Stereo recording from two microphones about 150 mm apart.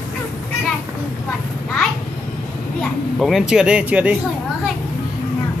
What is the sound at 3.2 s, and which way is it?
Speech, centre (ahead or behind).